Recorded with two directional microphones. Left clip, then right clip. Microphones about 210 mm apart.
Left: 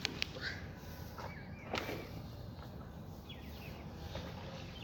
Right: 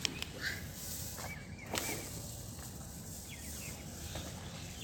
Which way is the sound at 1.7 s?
40° left (ahead or behind).